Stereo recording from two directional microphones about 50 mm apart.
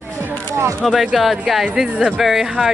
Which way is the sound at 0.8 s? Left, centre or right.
Centre.